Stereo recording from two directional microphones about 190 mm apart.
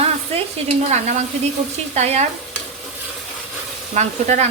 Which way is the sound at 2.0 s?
35° right (ahead or behind).